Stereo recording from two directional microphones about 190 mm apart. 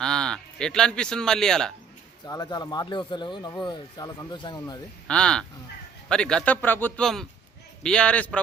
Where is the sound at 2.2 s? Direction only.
20° left (ahead or behind).